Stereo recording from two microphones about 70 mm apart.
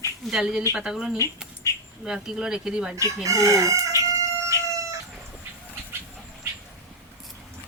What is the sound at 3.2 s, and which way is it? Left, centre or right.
Chicken, right.